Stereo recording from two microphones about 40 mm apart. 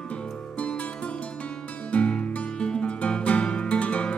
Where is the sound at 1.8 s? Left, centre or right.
Left.